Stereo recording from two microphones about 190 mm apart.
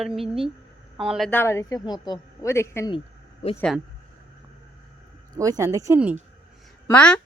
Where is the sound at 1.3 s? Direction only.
10° left (ahead or behind).